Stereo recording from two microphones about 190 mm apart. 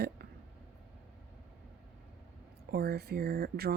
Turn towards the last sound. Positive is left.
turn(degrees=-55)  # may be behind; listen again after turning